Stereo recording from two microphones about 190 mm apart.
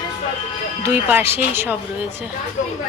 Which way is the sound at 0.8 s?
10° right (ahead or behind).